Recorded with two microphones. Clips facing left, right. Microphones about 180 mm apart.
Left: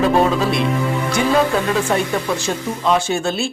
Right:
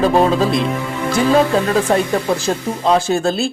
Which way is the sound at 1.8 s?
35° right (ahead or behind).